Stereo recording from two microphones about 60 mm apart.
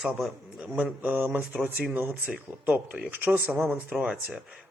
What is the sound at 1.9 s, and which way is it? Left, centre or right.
Speech, right.